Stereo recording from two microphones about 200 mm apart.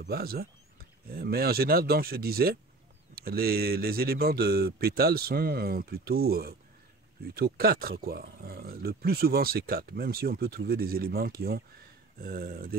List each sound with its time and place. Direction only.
0.0 s speech: 50° right (ahead or behind)